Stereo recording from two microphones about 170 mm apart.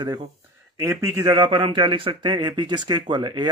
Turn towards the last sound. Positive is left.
turn(degrees=-25)  # may be behind; listen again after turning